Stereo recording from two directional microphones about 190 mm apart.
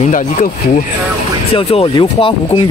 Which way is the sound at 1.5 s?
30° left (ahead or behind).